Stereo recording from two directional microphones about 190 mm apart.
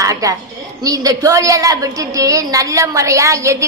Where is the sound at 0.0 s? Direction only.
20° right (ahead or behind).